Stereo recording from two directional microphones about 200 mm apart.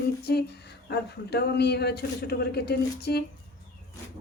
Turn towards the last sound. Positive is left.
turn(degrees=55)  # may be behind; listen again after turning